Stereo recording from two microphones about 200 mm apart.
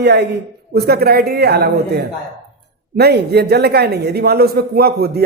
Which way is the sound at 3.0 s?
55° right (ahead or behind).